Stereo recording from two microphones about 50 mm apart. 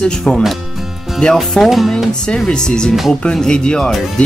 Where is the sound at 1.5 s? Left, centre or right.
Centre.